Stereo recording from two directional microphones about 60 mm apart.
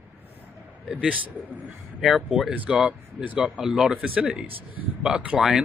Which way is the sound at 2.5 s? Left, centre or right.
Centre.